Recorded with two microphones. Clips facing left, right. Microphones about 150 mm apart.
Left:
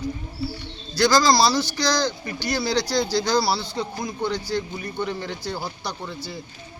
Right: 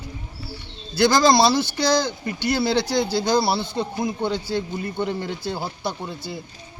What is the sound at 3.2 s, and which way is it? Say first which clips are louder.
Speech: right 2 dB; 20° right (ahead or behind).